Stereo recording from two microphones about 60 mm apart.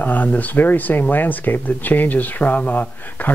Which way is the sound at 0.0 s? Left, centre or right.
Left.